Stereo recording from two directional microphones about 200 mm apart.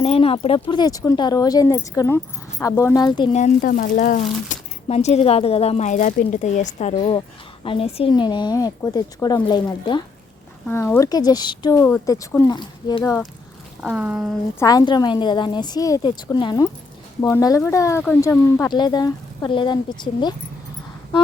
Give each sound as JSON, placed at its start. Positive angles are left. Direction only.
{"t": 0.0, "sound": "speech", "side_deg": 30}
{"t": 3.3, "sound": "speech", "side_deg": 40}
{"t": 10.7, "sound": "speech", "side_deg": 10}
{"t": 13.8, "sound": "speech", "side_deg": -5}
{"t": 14.6, "sound": "speech", "side_deg": 20}